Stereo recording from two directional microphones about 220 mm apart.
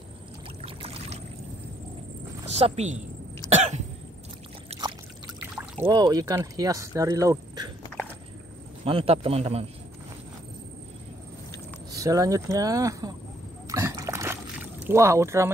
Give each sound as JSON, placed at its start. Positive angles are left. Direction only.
{"t": 0.6, "sound": "rowboat", "side_deg": -25}
{"t": 2.5, "sound": "a man's voice", "side_deg": -30}
{"t": 3.4, "sound": "cough", "side_deg": -30}
{"t": 4.6, "sound": "a sound", "side_deg": -20}
{"t": 5.6, "sound": "speech", "side_deg": -15}
{"t": 8.8, "sound": "a man's voice", "side_deg": -25}
{"t": 11.9, "sound": "speech", "side_deg": -15}
{"t": 13.7, "sound": "a sound", "side_deg": -15}